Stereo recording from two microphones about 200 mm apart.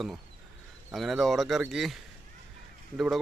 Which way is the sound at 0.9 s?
Centre (ahead or behind).